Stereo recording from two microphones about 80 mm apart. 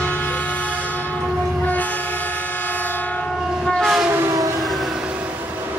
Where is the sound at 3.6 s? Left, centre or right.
Centre.